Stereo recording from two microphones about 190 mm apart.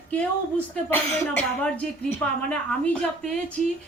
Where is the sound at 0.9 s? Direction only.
10° left (ahead or behind).